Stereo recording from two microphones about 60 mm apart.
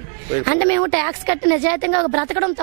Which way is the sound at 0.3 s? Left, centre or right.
Right.